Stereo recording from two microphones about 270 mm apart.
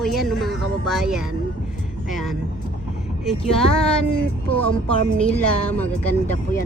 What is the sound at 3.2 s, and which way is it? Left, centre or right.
Speech, centre.